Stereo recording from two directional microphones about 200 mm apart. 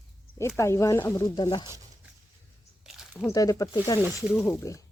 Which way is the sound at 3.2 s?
15° left (ahead or behind).